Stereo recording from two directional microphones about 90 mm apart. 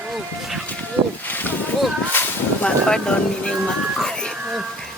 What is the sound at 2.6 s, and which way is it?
Speech, 10° left (ahead or behind).